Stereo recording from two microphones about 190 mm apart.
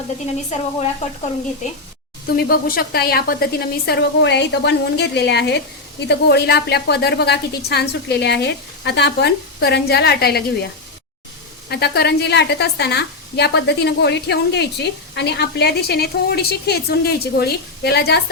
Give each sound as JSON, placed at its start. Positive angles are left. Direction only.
{"t": 2.2, "sound": "speech", "side_deg": 55}
{"t": 11.7, "sound": "speech", "side_deg": 60}